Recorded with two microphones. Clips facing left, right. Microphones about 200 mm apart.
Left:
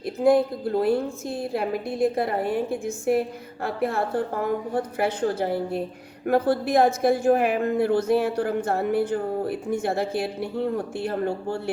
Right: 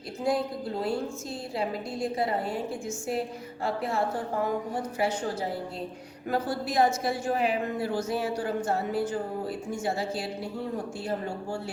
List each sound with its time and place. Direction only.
0.0 s a woman's voice: 55° left (ahead or behind)